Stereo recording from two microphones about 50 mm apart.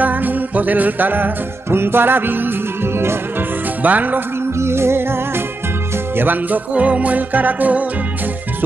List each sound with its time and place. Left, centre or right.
0.0 s music: right
3.8 s music: right
4.6 s music: right
6.1 s music: right